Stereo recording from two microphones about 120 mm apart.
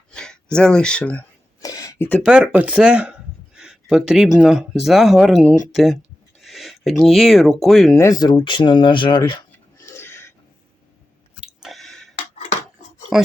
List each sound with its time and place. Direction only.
0.1 s a sound: 5° left (ahead or behind)
0.5 s speech: 5° left (ahead or behind)
1.6 s a sound: 30° left (ahead or behind)
2.0 s speech: 15° left (ahead or behind)
2.2 s speech: 10° right (ahead or behind)
7.9 s speech: 30° left (ahead or behind)
9.8 s a sound: 20° left (ahead or behind)
11.3 s chewing: 5° right (ahead or behind)
13.1 s speech: centre (ahead or behind)